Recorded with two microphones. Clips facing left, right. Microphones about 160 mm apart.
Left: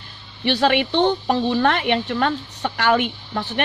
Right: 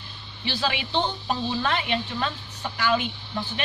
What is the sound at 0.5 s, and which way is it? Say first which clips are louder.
Speech: left 10 dB; 65° left (ahead or behind).